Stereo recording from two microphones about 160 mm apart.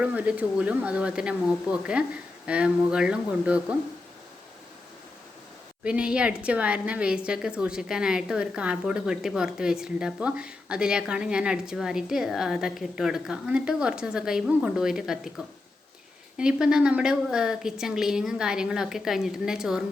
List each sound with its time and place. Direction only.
0.0 s speech: 10° right (ahead or behind)
5.8 s a woman's voice: 5° right (ahead or behind)